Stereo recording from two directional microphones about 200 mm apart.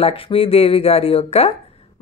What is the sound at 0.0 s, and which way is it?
Speech, 30° left (ahead or behind).